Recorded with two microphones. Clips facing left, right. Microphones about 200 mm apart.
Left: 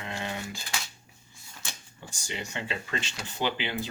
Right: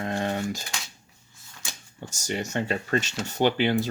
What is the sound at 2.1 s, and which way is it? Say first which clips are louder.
Speech: right 8 dB; 45° right (ahead or behind).